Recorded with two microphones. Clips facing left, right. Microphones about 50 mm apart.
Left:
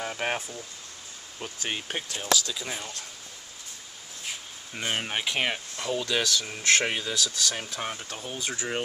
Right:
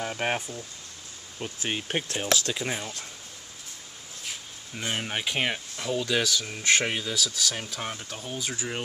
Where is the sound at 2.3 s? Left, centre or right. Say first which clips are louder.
Even; right.